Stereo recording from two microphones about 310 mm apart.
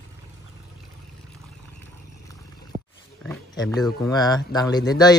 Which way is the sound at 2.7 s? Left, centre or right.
Right.